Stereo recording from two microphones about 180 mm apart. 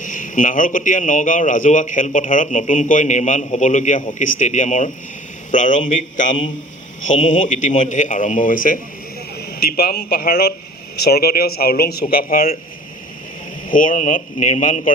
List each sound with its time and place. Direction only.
0.0 s a man's voice: 45° left (ahead or behind)
7.1 s speech: 90° left
7.3 s a man's voice: 45° left (ahead or behind)
9.4 s a man's voice: 60° left (ahead or behind)
13.7 s a man's voice: 50° left (ahead or behind)